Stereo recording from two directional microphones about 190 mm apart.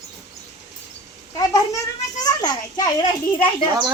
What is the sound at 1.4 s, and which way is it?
A child's voice, 20° left (ahead or behind).